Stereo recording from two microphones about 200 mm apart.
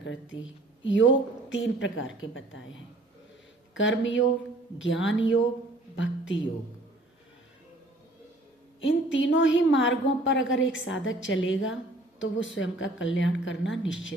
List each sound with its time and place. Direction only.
0.0 s a woman's voice: 70° left (ahead or behind)
3.8 s a woman's voice: 65° left (ahead or behind)
8.8 s a woman's voice: 70° left (ahead or behind)